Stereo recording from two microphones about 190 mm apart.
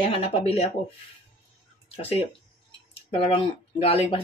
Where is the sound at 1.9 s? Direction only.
30° left (ahead or behind).